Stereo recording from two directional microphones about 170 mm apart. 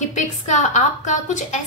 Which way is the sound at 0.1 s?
45° left (ahead or behind).